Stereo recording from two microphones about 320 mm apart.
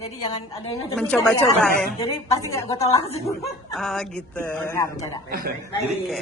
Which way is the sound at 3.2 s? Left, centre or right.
Centre.